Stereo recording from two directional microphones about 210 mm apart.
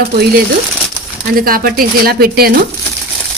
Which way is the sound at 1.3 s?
45° right (ahead or behind).